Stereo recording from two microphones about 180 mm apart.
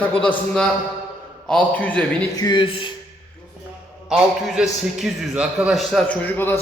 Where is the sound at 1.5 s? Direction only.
10° left (ahead or behind).